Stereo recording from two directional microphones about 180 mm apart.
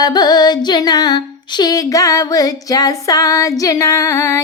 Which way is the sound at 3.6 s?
20° left (ahead or behind).